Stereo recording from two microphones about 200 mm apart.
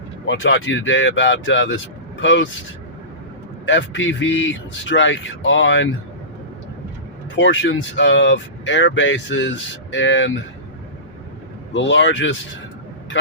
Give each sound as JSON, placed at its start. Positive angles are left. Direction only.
{"t": 0.3, "sound": "speech", "side_deg": 70}
{"t": 3.7, "sound": "speech", "side_deg": 70}
{"t": 7.3, "sound": "speech", "side_deg": 65}
{"t": 11.7, "sound": "speech", "side_deg": 65}